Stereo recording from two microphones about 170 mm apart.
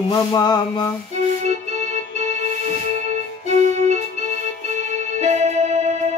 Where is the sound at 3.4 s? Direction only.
40° right (ahead or behind).